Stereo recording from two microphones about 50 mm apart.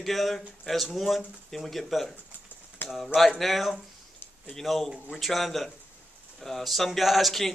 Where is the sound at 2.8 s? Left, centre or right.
Left.